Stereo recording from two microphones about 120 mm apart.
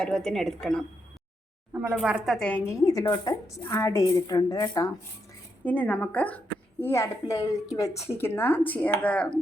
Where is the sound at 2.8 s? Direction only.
30° left (ahead or behind).